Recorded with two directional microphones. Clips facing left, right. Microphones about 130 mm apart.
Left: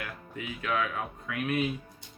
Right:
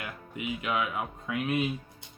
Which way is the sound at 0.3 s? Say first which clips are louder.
Right 1 dB; 15° right (ahead or behind).